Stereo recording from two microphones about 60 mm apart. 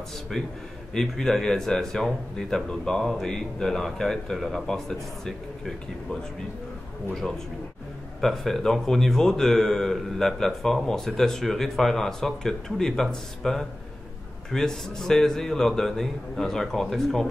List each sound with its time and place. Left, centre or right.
0.9 s speech: centre
7.2 s speech: centre
8.2 s speech: centre